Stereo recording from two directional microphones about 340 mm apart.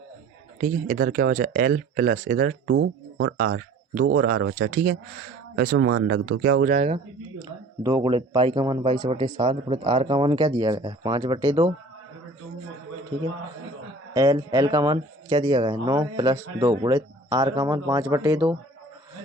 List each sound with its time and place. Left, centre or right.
0.6 s speech: right
2.6 s speech: right; by 11.7 s centre
14.1 s speech: centre